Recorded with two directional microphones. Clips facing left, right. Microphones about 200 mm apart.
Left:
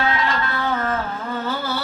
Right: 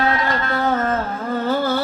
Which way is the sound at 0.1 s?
45° right (ahead or behind).